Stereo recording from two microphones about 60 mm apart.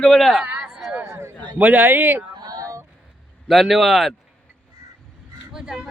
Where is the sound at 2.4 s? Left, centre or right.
Right.